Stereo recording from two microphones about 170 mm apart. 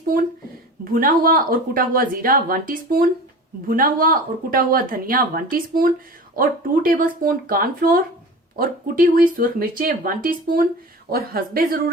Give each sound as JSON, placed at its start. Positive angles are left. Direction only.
{"t": 0.1, "sound": "speech", "side_deg": -60}